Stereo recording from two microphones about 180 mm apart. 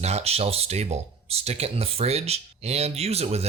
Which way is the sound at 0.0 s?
35° right (ahead or behind).